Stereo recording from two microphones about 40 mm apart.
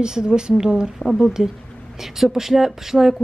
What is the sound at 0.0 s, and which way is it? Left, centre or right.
Speech, centre.